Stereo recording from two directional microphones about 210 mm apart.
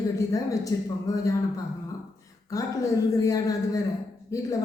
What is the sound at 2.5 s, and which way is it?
Speech, 15° left (ahead or behind).